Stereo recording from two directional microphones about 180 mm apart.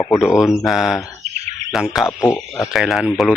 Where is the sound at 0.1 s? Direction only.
Centre (ahead or behind).